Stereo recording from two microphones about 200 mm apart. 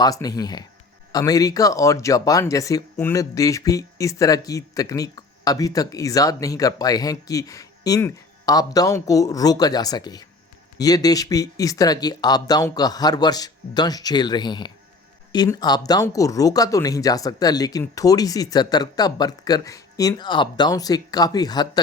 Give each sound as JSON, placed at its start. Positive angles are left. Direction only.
{"t": 0.0, "sound": "speech", "side_deg": 20}